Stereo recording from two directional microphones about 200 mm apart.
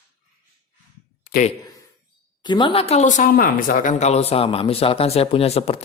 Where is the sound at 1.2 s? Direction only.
45° left (ahead or behind).